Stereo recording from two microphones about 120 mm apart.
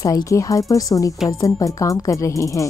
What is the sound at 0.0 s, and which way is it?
Speech, 30° left (ahead or behind).